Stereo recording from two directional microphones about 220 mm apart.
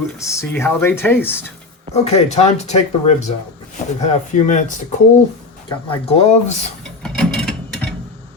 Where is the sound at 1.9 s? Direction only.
30° left (ahead or behind).